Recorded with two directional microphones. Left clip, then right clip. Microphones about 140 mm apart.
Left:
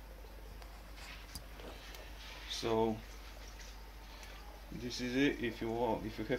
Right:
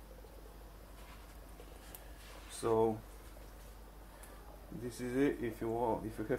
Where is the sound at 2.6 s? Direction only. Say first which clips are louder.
Right 2 dB; 10° left (ahead or behind).